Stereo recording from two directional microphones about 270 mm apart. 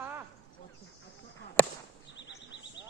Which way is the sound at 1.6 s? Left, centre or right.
Centre.